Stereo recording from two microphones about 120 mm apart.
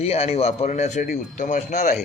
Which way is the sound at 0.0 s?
55° left (ahead or behind).